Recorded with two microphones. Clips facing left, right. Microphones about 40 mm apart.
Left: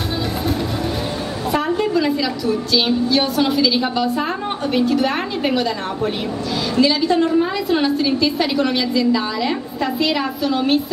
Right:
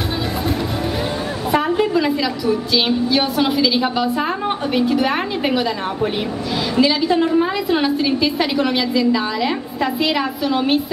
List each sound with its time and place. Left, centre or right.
1.5 s a woman's voice: centre
6.8 s a woman's voice: centre